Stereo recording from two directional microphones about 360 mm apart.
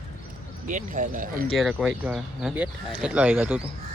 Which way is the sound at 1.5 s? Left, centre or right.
Centre.